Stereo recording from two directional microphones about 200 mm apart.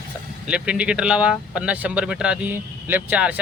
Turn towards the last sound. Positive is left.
turn(degrees=-10)  # may be behind; listen again after turning